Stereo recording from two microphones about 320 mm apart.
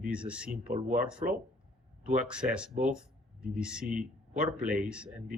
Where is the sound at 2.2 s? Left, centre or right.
Centre.